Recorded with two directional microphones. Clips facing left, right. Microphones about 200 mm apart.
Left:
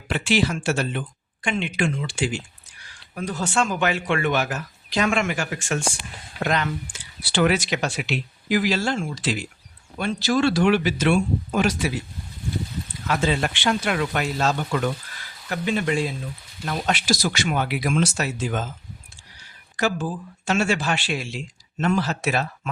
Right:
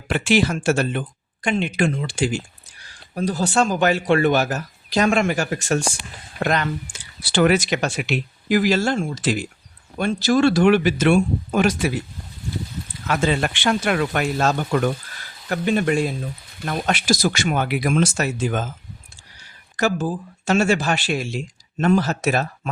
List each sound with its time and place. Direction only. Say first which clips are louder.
0.1 s speech: right 3 dB; 50° right (ahead or behind)
13.2 s speech: right 3 dB; 55° right (ahead or behind)
19.7 s speech: right 3 dB; 40° right (ahead or behind)